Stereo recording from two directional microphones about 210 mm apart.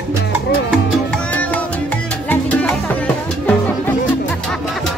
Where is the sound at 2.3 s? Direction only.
5° left (ahead or behind).